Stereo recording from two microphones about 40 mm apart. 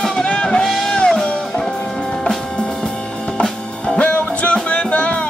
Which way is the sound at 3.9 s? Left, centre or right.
Left.